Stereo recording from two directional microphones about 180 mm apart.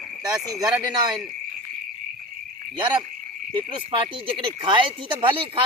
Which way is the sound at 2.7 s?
25° right (ahead or behind).